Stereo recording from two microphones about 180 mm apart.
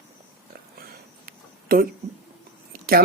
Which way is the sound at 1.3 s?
55° right (ahead or behind).